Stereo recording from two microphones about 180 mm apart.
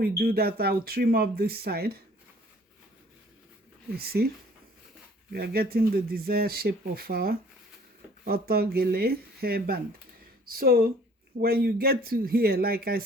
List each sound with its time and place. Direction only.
0.0 s speech: 55° right (ahead or behind)
3.9 s speech: 60° right (ahead or behind)
5.3 s speech: 60° right (ahead or behind)